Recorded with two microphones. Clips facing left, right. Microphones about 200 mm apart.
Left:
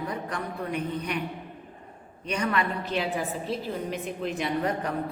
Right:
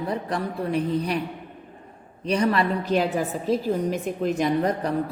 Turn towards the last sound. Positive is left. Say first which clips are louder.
# right 5 dB
turn(degrees=-40)  # may be behind; listen again after turning